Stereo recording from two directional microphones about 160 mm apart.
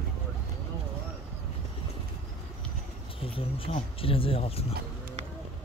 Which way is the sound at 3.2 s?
35° left (ahead or behind).